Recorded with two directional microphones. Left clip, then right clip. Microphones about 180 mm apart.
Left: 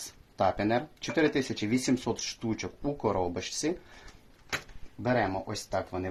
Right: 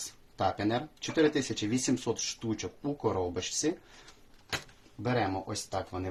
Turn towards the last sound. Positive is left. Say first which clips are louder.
# left 3 dB
turn(degrees=35)  # may be behind; listen again after turning